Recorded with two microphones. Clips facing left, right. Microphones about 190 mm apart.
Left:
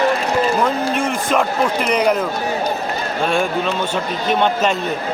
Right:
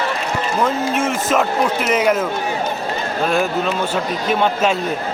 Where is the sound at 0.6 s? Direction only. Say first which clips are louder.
Even; centre (ahead or behind).